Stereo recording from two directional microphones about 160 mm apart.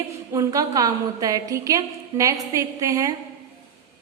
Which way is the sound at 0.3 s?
20° right (ahead or behind).